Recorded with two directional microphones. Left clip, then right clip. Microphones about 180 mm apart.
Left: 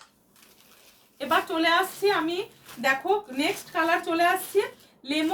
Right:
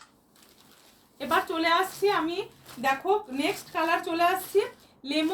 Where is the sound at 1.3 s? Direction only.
15° left (ahead or behind).